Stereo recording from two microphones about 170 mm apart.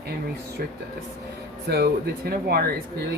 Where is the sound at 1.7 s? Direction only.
65° right (ahead or behind).